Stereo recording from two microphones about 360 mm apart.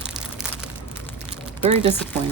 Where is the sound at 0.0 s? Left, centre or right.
Centre.